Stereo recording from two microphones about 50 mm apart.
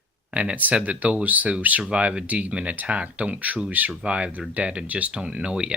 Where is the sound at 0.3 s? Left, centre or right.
Right.